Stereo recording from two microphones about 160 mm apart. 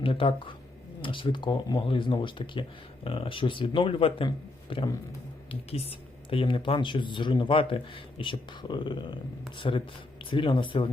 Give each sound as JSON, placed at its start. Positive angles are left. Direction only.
{"t": 0.0, "sound": "speech", "side_deg": 35}
{"t": 6.3, "sound": "speech", "side_deg": 35}